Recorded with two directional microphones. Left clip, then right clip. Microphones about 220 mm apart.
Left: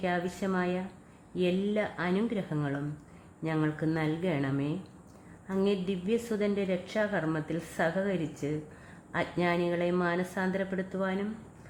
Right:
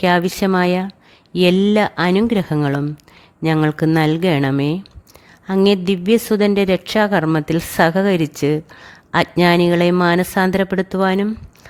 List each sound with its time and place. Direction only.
0.0 s a woman's voice: 50° right (ahead or behind)